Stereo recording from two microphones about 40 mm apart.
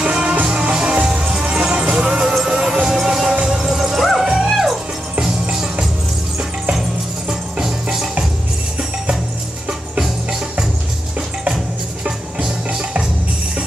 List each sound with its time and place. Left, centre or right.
0.0 s music: right; by 4.7 s centre
5.2 s music: centre
7.2 s music: centre
12.0 s music: right